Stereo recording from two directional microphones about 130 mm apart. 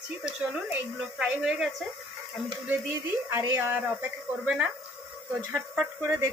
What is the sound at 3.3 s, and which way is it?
Speech, 15° right (ahead or behind).